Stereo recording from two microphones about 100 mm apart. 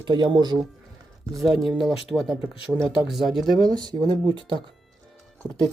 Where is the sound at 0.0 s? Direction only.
45° right (ahead or behind).